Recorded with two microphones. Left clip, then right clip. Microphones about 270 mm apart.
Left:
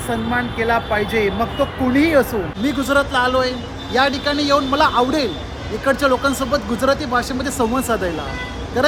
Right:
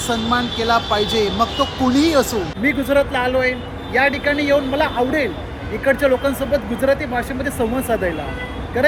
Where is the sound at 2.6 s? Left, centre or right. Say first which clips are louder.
Right 1 dB; centre.